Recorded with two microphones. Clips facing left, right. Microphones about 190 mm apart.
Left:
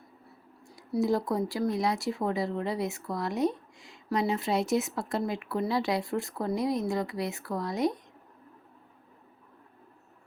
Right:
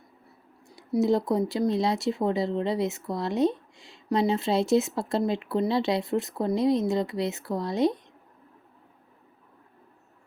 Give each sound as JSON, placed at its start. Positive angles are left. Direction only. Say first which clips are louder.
{"t": 0.8, "sound": "speech", "louder": "right 4 dB", "side_deg": -25}